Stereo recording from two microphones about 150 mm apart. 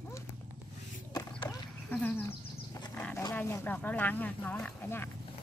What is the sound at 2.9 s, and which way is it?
Wild animals, 10° left (ahead or behind).